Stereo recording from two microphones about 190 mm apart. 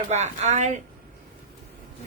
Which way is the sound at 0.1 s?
35° right (ahead or behind).